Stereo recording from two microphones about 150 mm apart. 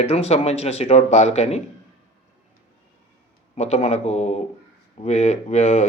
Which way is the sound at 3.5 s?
45° left (ahead or behind).